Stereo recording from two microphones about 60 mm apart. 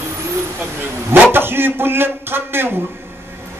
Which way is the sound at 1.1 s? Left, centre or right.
Right.